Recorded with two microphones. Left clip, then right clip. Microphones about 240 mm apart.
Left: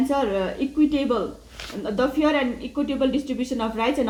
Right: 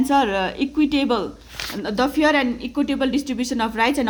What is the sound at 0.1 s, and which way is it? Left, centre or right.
Speech, right.